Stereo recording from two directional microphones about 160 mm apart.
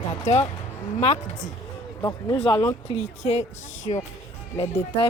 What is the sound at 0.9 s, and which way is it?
Speech, 45° left (ahead or behind).